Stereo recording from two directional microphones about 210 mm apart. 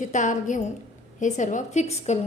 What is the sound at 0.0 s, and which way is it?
A woman's voice, 35° left (ahead or behind).